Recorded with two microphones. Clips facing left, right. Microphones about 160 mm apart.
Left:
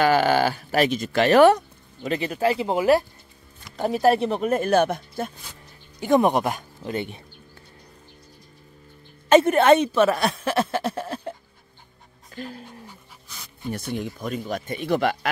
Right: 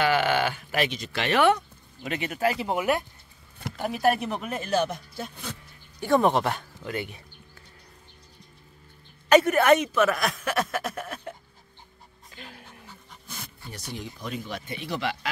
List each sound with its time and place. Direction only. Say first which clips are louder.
0.0 s speech: left 5 dB; 40° left (ahead or behind)
4.5 s speech: left 7 dB; 55° left (ahead or behind)
5.9 s speech: left 3 dB; 20° left (ahead or behind)
6.8 s speech: left 4 dB; 25° left (ahead or behind)
9.3 s speech: left 3 dB; 25° left (ahead or behind)
12.4 s speech: left 11 dB; 35° left (ahead or behind)
13.7 s speech: left 10 dB; 55° left (ahead or behind)